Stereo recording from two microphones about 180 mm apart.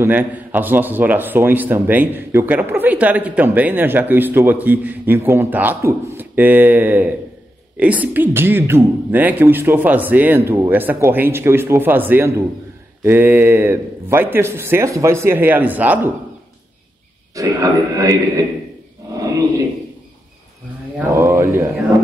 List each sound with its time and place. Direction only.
0.0 s a man's voice: 10° right (ahead or behind)
17.4 s a man's voice: 20° right (ahead or behind)
21.1 s speech: 15° right (ahead or behind)